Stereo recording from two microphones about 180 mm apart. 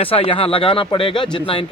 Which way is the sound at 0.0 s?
30° left (ahead or behind).